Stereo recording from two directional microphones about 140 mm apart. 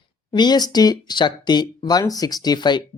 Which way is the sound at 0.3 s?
30° left (ahead or behind).